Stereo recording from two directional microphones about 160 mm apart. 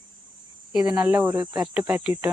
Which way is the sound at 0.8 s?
10° right (ahead or behind).